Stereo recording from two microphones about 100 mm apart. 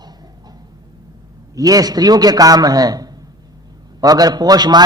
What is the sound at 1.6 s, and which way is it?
A man's voice, 40° right (ahead or behind).